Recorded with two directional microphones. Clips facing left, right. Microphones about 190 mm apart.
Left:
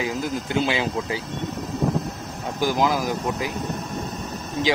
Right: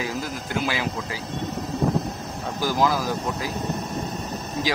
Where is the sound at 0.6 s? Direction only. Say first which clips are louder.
Left 3 dB; 25° left (ahead or behind).